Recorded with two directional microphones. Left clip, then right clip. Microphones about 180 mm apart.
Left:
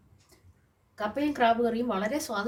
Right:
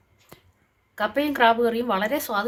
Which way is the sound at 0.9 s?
30° right (ahead or behind).